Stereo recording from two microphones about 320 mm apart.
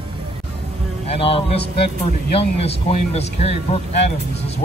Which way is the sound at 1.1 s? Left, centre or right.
Centre.